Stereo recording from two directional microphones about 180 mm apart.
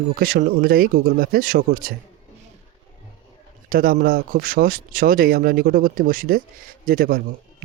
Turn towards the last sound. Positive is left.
turn(degrees=-55)  # may be behind; listen again after turning